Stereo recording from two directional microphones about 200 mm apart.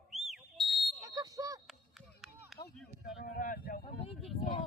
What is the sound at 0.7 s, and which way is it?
Smoke detector, centre (ahead or behind).